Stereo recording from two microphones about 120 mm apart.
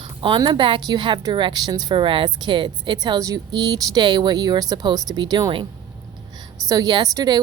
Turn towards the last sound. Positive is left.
turn(degrees=-35)  # may be behind; listen again after turning